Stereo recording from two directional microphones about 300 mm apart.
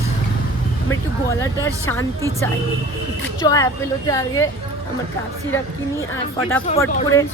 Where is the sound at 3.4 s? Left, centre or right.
Centre.